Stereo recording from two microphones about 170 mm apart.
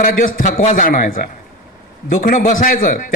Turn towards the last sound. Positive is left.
turn(degrees=55)  # may be behind; listen again after turning